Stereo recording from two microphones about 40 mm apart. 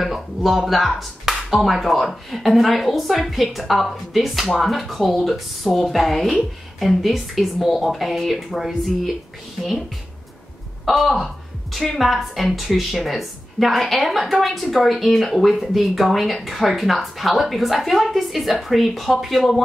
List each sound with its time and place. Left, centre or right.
0.0 s speech: centre
10.9 s speech: centre